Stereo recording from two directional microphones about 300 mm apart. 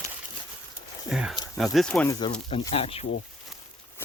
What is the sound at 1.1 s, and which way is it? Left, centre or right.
Speech, centre.